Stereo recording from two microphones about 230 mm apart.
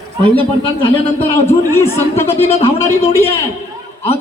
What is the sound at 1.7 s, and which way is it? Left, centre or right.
Speech, centre.